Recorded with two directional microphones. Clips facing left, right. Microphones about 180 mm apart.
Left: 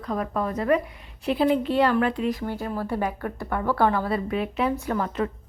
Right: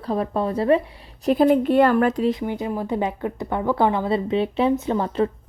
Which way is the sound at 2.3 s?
15° right (ahead or behind).